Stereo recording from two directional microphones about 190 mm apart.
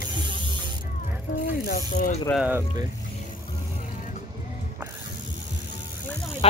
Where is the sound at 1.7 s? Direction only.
50° left (ahead or behind).